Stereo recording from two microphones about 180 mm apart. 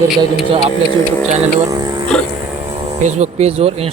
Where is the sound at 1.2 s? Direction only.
40° right (ahead or behind).